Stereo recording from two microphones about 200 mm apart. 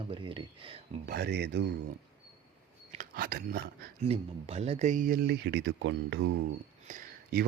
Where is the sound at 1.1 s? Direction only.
55° right (ahead or behind).